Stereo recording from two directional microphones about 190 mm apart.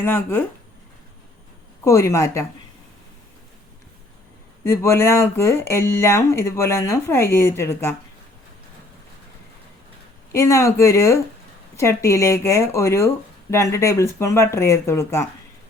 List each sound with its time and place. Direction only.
0.0 s speech: 10° left (ahead or behind)
1.8 s speech: 15° left (ahead or behind)
4.6 s speech: 15° left (ahead or behind)
10.3 s speech: 15° left (ahead or behind)